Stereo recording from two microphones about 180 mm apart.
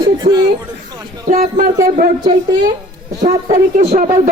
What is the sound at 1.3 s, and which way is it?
Speech, 45° right (ahead or behind).